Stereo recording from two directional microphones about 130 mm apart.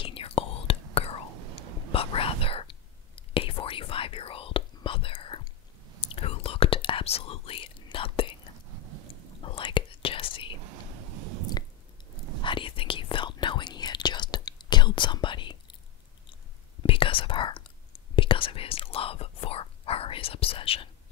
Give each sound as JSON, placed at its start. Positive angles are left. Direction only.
{"t": 0.0, "sound": "whispering", "side_deg": 45}
{"t": 9.4, "sound": "whispering", "side_deg": 40}
{"t": 12.4, "sound": "whispering", "side_deg": 40}
{"t": 16.8, "sound": "whispering", "side_deg": 45}